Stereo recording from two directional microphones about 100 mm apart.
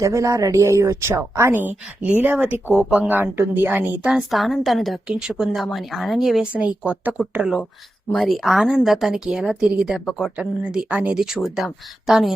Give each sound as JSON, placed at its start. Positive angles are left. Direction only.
{"t": 0.0, "sound": "a woman's voice", "side_deg": -30}
{"t": 4.1, "sound": "a woman's voice", "side_deg": 0}
{"t": 6.5, "sound": "a woman's voice", "side_deg": -15}